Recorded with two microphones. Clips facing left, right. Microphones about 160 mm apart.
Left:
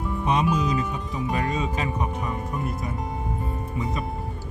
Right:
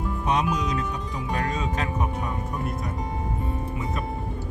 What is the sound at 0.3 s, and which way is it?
Speech, centre (ahead or behind).